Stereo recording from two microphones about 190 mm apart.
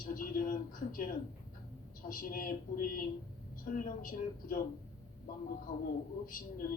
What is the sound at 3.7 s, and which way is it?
Speech, 45° left (ahead or behind).